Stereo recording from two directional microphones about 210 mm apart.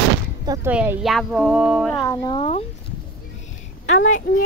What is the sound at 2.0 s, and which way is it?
Speech, 15° left (ahead or behind).